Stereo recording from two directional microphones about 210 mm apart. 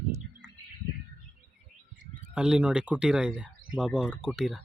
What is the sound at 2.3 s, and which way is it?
Speech, 5° right (ahead or behind).